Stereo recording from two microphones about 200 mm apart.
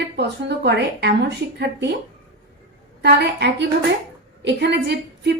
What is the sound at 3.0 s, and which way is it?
A woman's voice, 55° right (ahead or behind).